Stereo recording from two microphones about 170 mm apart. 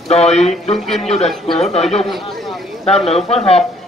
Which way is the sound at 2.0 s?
Centre (ahead or behind).